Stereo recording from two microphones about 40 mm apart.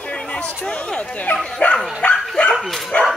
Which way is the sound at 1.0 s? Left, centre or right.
Left.